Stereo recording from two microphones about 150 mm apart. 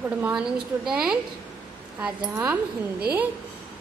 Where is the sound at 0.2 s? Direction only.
5° right (ahead or behind).